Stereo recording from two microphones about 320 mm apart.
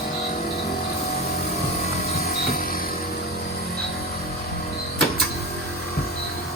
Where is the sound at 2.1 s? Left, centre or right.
Left.